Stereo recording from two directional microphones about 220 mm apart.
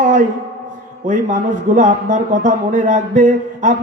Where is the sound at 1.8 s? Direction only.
35° right (ahead or behind).